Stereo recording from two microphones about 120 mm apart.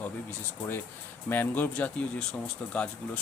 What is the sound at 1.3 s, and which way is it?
Speech, 15° left (ahead or behind).